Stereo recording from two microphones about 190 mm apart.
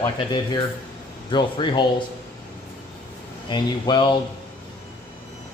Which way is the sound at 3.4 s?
25° left (ahead or behind).